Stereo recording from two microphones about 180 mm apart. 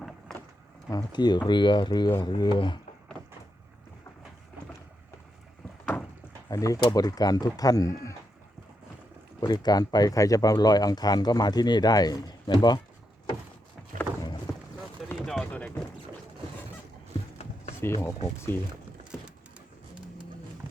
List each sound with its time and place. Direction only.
0.9 s speech: 20° left (ahead or behind)
5.8 s a sound: 5° left (ahead or behind)
6.5 s speech: 20° left (ahead or behind)
9.4 s speech: 20° left (ahead or behind)
15.3 s a sound: 5° left (ahead or behind)
17.7 s speech: 15° left (ahead or behind)